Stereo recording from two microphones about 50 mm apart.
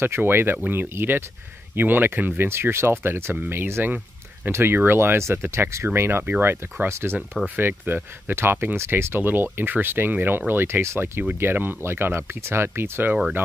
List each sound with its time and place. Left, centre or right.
0.0 s speech: right
4.5 s speech: right
4.7 s speech: right
7.4 s speech: right
8.9 s speech: right
10.5 s speech: right
11.3 s speech: right